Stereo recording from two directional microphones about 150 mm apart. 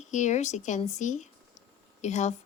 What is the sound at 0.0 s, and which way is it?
A woman's voice, 55° left (ahead or behind).